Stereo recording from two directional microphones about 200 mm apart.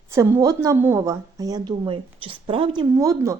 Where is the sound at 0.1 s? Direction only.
15° right (ahead or behind).